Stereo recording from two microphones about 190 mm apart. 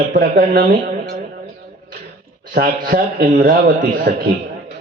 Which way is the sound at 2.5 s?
45° right (ahead or behind).